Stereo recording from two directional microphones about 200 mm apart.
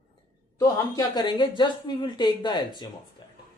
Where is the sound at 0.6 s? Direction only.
20° left (ahead or behind).